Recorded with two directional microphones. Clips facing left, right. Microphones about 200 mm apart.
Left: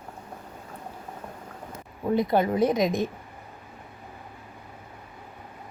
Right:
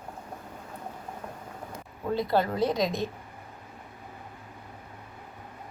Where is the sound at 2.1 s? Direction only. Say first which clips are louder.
Left 3 dB; 20° left (ahead or behind).